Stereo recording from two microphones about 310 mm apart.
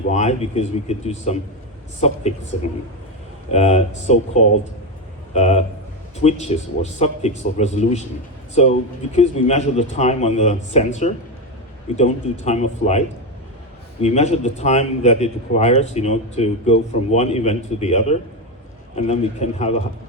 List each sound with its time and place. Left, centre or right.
0.1 s a man's voice: left